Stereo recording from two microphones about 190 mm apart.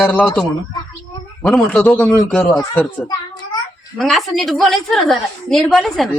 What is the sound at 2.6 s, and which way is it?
Speech, 15° left (ahead or behind).